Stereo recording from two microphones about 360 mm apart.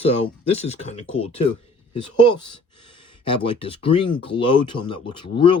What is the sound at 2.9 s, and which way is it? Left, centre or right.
Speech, centre.